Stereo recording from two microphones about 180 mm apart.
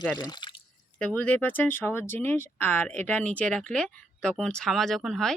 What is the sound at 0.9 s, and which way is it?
Speech, 5° left (ahead or behind).